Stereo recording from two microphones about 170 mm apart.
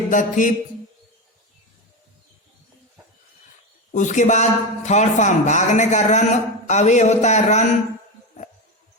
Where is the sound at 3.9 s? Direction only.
45° left (ahead or behind).